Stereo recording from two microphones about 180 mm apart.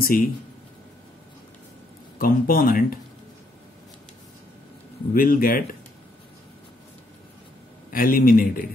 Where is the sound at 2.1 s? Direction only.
55° left (ahead or behind).